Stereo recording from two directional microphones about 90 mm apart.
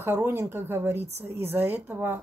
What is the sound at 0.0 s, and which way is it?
A woman's voice, 25° right (ahead or behind).